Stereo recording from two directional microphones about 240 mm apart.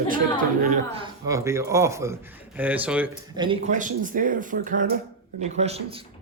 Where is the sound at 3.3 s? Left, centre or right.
Right.